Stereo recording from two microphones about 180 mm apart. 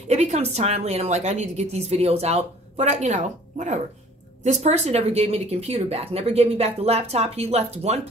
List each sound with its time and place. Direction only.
0.1 s a woman's voice: 40° right (ahead or behind)